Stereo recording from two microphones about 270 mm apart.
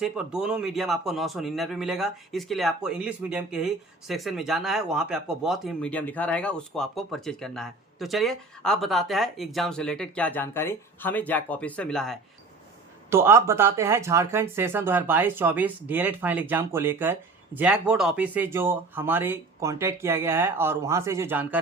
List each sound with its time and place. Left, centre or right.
0.0 s speech: centre
13.1 s speech: centre